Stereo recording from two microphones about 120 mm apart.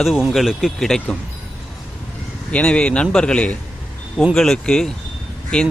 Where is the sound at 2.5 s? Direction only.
10° left (ahead or behind).